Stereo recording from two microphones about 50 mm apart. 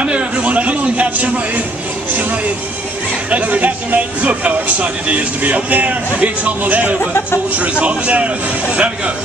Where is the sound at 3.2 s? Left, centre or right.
Right.